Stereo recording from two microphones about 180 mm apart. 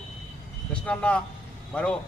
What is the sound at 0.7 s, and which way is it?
Speech, 5° left (ahead or behind).